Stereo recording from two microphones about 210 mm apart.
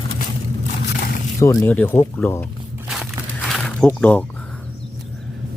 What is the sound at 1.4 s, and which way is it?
Speech, 10° left (ahead or behind).